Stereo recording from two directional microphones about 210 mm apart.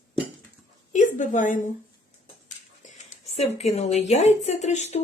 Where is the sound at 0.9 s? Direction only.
35° left (ahead or behind).